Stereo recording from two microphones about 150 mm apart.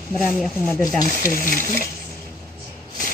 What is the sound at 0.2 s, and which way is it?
Speech, centre (ahead or behind).